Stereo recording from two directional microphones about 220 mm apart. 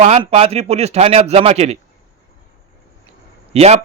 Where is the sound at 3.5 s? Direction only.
30° right (ahead or behind).